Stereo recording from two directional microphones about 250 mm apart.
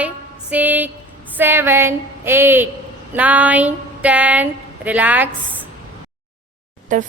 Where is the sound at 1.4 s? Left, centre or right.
Centre.